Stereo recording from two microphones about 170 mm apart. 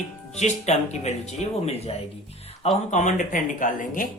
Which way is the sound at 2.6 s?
40° left (ahead or behind).